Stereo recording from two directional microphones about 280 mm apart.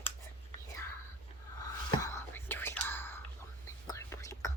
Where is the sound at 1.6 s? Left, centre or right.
Centre.